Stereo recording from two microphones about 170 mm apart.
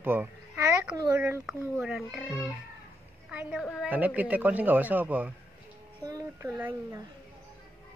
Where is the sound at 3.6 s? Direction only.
Centre (ahead or behind).